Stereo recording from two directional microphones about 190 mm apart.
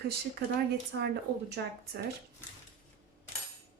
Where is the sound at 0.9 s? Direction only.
60° right (ahead or behind).